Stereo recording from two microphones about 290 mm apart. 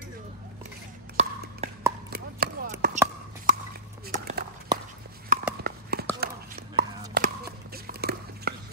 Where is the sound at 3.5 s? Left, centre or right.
Right.